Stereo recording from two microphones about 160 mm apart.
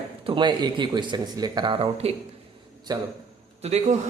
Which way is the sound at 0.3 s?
30° right (ahead or behind).